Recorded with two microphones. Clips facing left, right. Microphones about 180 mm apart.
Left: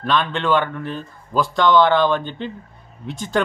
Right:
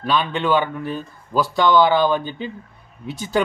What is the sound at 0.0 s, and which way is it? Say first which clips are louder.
Speech: even; 5° right (ahead or behind).